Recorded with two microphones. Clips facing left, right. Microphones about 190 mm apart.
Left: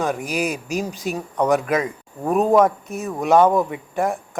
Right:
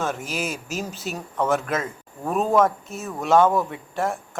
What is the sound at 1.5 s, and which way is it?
Speech, centre (ahead or behind).